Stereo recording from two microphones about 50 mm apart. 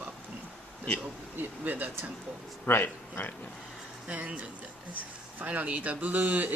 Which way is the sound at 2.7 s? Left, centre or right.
Left.